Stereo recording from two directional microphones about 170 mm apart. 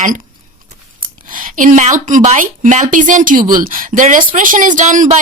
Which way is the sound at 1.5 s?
50° right (ahead or behind).